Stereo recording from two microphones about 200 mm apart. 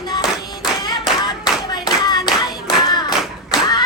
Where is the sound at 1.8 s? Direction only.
20° left (ahead or behind).